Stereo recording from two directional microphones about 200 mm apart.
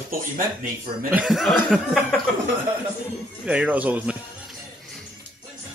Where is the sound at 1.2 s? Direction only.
Centre (ahead or behind).